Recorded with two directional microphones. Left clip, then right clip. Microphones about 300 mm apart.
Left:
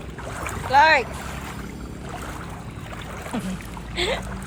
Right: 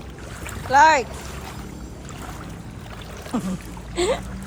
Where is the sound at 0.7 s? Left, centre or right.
Centre.